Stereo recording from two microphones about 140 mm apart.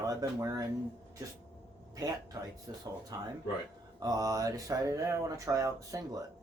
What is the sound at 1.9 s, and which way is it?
Mantra, 25° right (ahead or behind).